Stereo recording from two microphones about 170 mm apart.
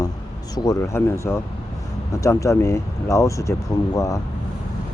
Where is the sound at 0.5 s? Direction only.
20° left (ahead or behind).